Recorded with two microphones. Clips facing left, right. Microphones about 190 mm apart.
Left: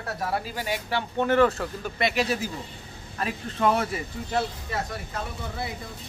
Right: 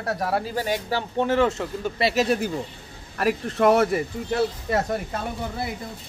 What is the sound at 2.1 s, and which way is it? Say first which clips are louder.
Speech: right 4 dB; 55° right (ahead or behind).